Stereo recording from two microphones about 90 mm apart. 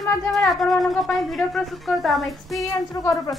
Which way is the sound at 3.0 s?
40° left (ahead or behind).